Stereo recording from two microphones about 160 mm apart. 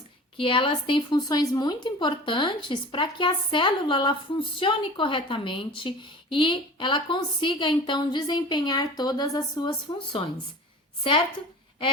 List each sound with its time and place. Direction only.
0.3 s a woman's voice: 30° left (ahead or behind)